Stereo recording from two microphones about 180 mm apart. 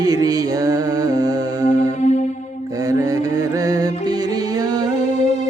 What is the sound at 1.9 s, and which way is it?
Music, 40° left (ahead or behind).